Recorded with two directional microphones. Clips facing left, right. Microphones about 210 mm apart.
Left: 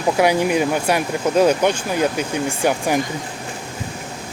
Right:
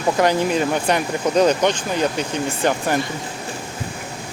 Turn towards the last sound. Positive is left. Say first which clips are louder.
# left 1 dB
turn(degrees=10)  # may be behind; listen again after turning